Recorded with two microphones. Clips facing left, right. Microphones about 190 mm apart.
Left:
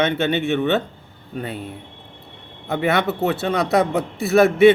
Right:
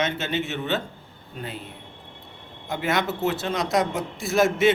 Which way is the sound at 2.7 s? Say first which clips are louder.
Left 5 dB; 60° left (ahead or behind).